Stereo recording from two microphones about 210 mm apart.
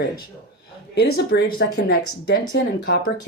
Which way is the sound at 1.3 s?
50° left (ahead or behind).